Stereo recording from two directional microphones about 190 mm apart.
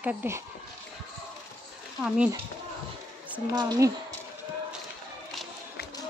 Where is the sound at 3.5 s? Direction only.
20° right (ahead or behind).